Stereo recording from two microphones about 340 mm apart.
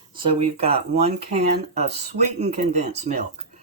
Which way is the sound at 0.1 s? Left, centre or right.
Centre.